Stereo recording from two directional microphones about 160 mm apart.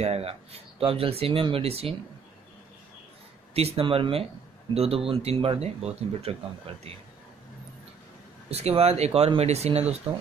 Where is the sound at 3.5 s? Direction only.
35° right (ahead or behind).